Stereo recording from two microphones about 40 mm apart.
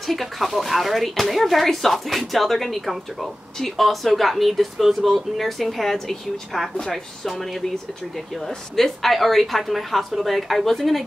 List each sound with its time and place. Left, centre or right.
0.0 s a woman's voice: centre